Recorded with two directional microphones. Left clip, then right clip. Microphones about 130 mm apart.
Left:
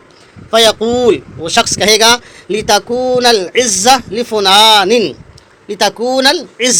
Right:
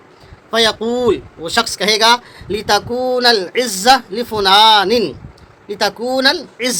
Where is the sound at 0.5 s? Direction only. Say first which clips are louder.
Left 5 dB; 20° left (ahead or behind).